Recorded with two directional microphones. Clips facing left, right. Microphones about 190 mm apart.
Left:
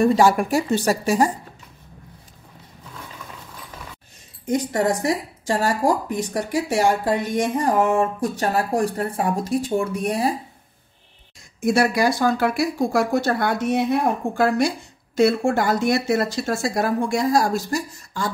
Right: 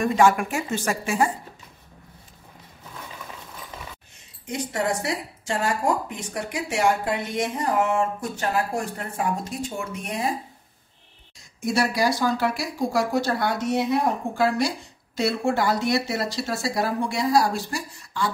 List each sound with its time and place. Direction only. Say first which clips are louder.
0.0 s a woman's voice: left 3 dB; 35° left (ahead or behind)
4.5 s a woman's voice: left 6 dB; 40° left (ahead or behind)
11.6 s speech: left 4 dB; 55° left (ahead or behind)